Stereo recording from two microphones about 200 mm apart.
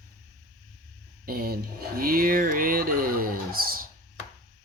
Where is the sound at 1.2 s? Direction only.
45° right (ahead or behind).